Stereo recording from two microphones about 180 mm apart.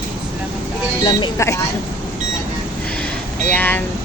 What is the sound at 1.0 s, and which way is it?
Speech, 20° left (ahead or behind).